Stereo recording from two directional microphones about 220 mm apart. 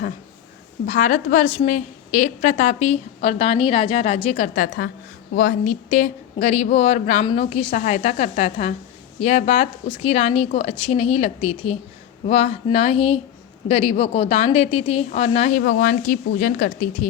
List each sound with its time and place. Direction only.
0.9 s a woman's voice: 35° left (ahead or behind)